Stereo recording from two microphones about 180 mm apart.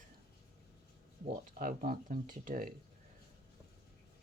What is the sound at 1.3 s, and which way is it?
Speech, 50° right (ahead or behind).